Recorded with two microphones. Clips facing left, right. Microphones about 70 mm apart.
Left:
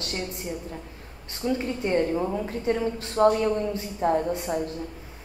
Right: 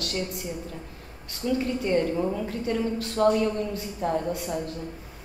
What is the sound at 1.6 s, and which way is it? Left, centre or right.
A woman's voice, left.